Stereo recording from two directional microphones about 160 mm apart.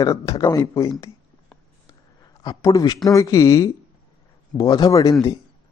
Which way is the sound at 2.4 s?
25° left (ahead or behind).